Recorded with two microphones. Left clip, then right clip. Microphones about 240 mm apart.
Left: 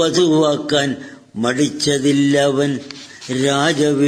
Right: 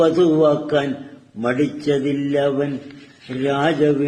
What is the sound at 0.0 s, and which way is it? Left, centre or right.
Mantra, left.